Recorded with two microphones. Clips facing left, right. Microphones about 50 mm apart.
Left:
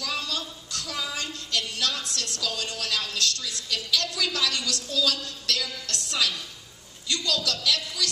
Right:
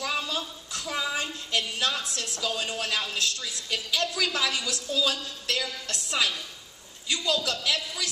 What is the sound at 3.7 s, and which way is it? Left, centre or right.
Speech, right.